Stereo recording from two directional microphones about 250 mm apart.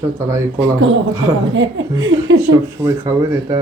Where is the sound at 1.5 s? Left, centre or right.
Right.